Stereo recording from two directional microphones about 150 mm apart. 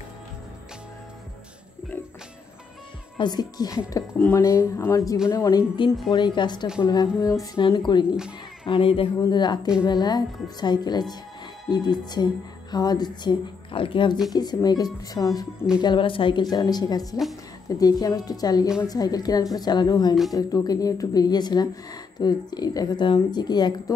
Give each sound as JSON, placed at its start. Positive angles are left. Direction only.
{"t": 3.2, "sound": "speech", "side_deg": 30}